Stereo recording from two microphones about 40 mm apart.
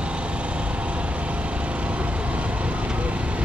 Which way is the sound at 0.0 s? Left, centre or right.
Right.